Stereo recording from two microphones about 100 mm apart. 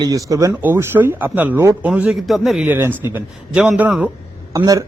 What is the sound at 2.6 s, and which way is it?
Speech, 20° right (ahead or behind).